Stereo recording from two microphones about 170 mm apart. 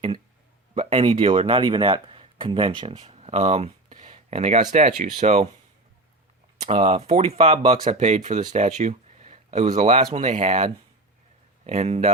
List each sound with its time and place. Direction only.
0.7 s speech: 35° right (ahead or behind)
6.7 s speech: 35° right (ahead or behind)